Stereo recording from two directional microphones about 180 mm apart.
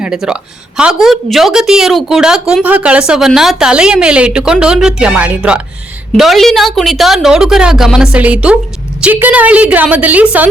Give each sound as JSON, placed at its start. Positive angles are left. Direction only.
{"t": 0.0, "sound": "a woman's voice", "side_deg": -5}